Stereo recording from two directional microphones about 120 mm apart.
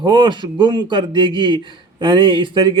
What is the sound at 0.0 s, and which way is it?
A man's voice, 40° right (ahead or behind).